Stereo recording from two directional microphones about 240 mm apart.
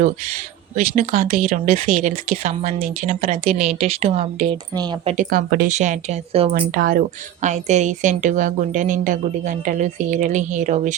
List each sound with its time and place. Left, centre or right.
0.8 s speech: right; by 5.1 s centre
5.1 s a woman's voice: right
6.6 s a woman's voice: right